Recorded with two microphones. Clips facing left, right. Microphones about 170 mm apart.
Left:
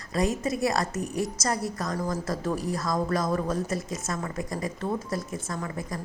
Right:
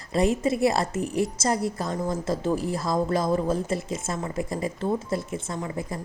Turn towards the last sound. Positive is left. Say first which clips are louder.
# right 2 dB
turn(degrees=-25)  # may be behind; listen again after turning